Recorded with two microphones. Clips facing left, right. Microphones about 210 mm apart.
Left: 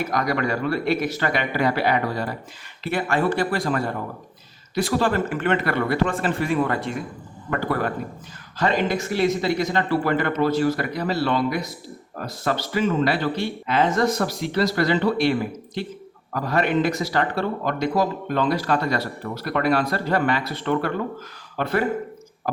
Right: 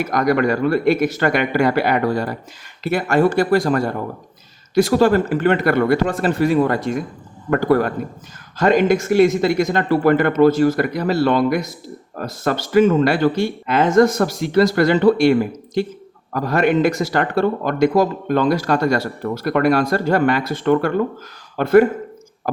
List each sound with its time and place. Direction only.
0.1 s speech: 50° right (ahead or behind)